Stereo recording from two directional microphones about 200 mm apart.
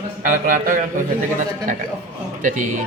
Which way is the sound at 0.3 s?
45° right (ahead or behind).